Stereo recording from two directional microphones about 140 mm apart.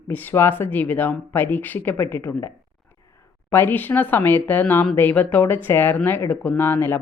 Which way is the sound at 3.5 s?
15° left (ahead or behind).